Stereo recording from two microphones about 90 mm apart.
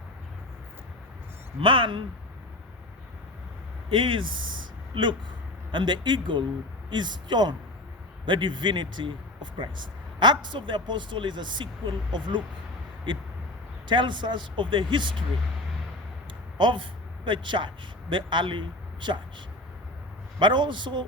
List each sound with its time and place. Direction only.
1.6 s speech: 70° right (ahead or behind)
3.8 s speech: 65° right (ahead or behind)
16.6 s speech: 60° right (ahead or behind)
20.4 s speech: 60° right (ahead or behind)